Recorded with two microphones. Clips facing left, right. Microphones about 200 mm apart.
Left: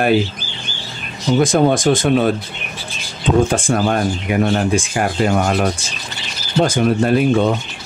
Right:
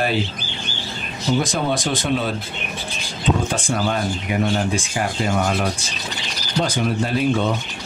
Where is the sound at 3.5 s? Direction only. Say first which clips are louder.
Left 5 dB; 50° left (ahead or behind).